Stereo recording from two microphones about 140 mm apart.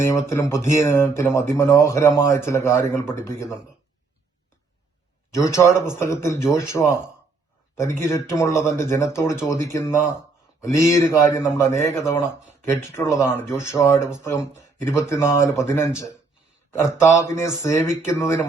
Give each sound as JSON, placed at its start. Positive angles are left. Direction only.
{"t": 0.0, "sound": "speech", "side_deg": 20}
{"t": 5.3, "sound": "speech", "side_deg": 20}